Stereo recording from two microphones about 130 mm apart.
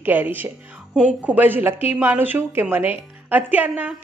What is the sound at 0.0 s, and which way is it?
A woman's voice, 15° right (ahead or behind).